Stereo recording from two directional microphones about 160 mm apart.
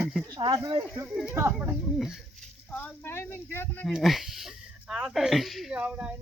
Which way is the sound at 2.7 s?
10° left (ahead or behind).